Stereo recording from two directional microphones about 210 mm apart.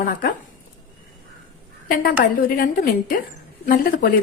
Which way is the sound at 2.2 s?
45° left (ahead or behind).